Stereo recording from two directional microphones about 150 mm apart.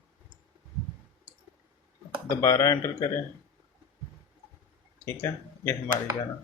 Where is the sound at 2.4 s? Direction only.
20° left (ahead or behind).